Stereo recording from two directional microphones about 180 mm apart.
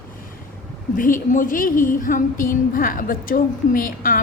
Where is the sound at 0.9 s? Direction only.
50° left (ahead or behind).